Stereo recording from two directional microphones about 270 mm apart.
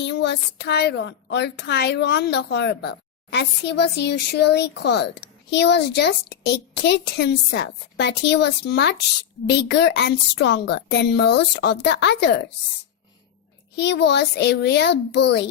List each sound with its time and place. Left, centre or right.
0.0 s a woman's voice: left
13.7 s a woman's voice: left